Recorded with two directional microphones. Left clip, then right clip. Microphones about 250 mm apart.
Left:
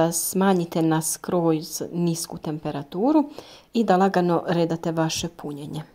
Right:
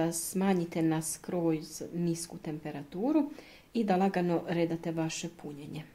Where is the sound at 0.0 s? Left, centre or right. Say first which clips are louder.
Left 11 dB; left.